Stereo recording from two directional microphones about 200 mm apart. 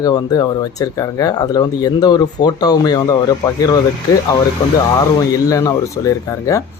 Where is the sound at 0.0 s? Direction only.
20° left (ahead or behind).